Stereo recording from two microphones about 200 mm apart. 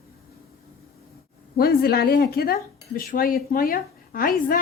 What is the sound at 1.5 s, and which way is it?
A woman's voice, 50° left (ahead or behind).